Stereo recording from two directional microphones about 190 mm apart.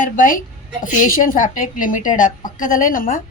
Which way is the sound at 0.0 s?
45° left (ahead or behind).